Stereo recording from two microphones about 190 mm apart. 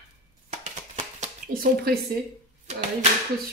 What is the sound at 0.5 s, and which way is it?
Dishes, 35° right (ahead or behind).